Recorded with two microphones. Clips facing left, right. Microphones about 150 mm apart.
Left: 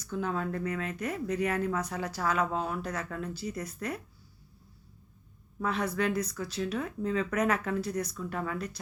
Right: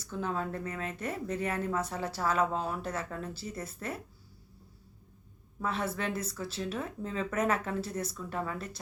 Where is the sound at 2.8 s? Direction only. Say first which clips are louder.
Left 1 dB; 25° right (ahead or behind).